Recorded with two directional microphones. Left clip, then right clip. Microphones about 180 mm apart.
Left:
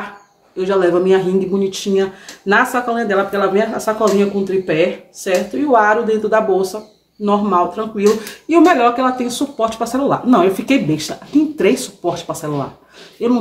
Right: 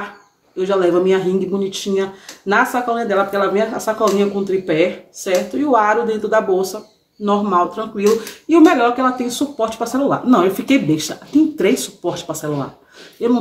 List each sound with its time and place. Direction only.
0.6 s speech: 5° right (ahead or behind)